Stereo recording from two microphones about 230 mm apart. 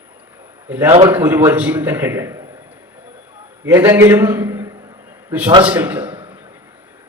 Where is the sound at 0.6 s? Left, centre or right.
Centre.